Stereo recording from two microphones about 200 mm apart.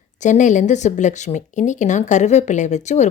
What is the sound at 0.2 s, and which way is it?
Speech, 40° left (ahead or behind).